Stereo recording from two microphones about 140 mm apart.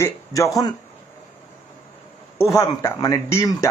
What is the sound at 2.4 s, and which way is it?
Speech, 20° left (ahead or behind).